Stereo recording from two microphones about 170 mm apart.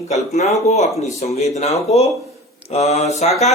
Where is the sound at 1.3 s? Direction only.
40° left (ahead or behind).